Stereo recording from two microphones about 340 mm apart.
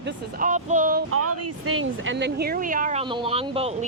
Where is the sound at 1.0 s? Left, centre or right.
Right.